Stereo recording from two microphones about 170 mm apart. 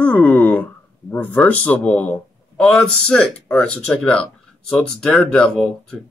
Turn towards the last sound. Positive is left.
turn(degrees=0)  # may be behind; listen again after turning